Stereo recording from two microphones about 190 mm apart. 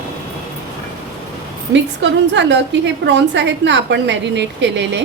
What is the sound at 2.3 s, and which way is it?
A woman's voice, 70° right (ahead or behind).